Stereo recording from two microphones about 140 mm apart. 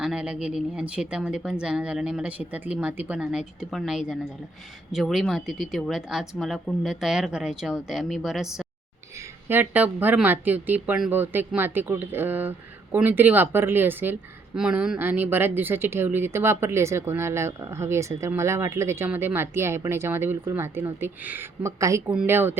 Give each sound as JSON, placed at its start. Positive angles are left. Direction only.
{"t": 0.0, "sound": "a woman's voice", "side_deg": -5}
{"t": 9.1, "sound": "speech", "side_deg": -15}
{"t": 22.1, "sound": "speech", "side_deg": -10}